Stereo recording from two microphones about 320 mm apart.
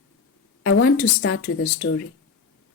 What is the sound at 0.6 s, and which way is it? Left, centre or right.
A woman's voice, left.